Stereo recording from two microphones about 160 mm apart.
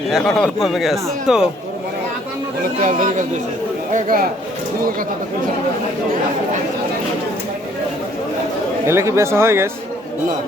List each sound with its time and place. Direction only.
0.1 s speech: centre (ahead or behind)
2.8 s a man's voice: 55° right (ahead or behind)
8.9 s speech: 15° right (ahead or behind)